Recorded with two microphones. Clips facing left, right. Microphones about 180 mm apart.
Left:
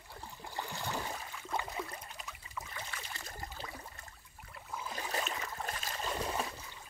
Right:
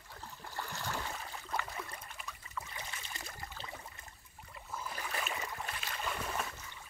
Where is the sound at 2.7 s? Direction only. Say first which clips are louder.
Left 1 dB; 20° right (ahead or behind).